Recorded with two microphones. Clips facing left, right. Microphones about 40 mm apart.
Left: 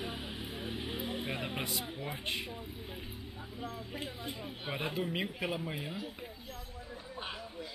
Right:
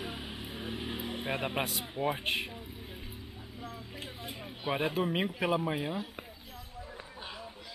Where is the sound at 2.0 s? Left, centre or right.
Right.